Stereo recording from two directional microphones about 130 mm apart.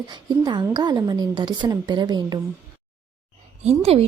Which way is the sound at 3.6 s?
55° right (ahead or behind).